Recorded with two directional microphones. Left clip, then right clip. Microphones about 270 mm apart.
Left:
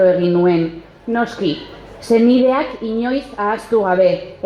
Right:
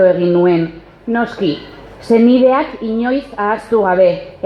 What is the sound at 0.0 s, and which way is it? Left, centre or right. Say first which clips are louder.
Speech: right 2 dB; right.